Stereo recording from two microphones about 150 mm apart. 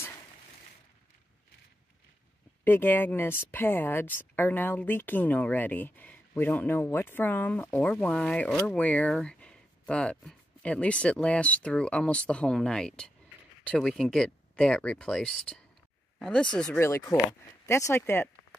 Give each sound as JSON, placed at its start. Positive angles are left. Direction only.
{"t": 2.6, "sound": "speech", "side_deg": 15}
{"t": 16.7, "sound": "speech", "side_deg": 15}